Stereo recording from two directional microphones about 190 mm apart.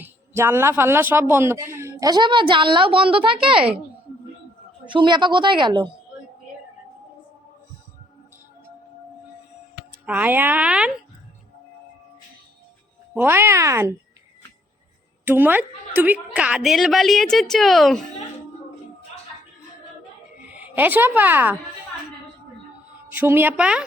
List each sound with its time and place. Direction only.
0.0 s speech: 10° right (ahead or behind); by 3.6 s 25° right (ahead or behind)
4.9 s a woman's voice: 25° right (ahead or behind)
10.1 s speech: 10° right (ahead or behind)
13.1 s speech: 10° right (ahead or behind)
15.2 s a woman's voice: 10° right (ahead or behind)
20.5 s a woman's voice: 10° right (ahead or behind)
23.1 s speech: 10° right (ahead or behind)